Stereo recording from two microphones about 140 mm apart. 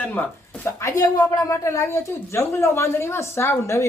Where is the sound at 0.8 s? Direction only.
25° left (ahead or behind).